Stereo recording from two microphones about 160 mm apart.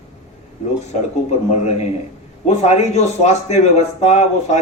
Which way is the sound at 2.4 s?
45° left (ahead or behind).